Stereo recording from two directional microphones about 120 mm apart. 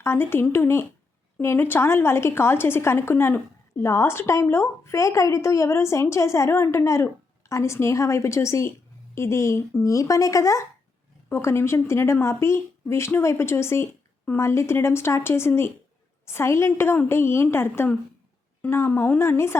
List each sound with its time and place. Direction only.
0.0 s a woman's voice: 20° left (ahead or behind)